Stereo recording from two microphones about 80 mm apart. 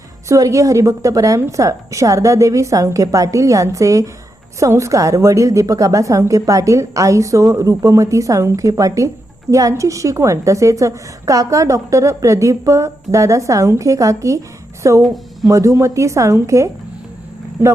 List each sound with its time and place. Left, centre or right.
0.3 s a woman's voice: right
15.0 s speech: centre
15.4 s a woman's voice: right
17.6 s speech: right